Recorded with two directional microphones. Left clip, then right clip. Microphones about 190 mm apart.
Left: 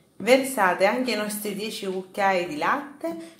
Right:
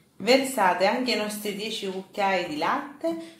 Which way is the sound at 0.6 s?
20° left (ahead or behind).